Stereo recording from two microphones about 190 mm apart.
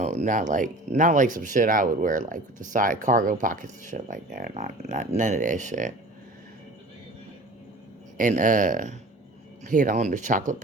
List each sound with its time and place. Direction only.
0.0 s speech: 40° right (ahead or behind)
8.2 s speech: 45° right (ahead or behind)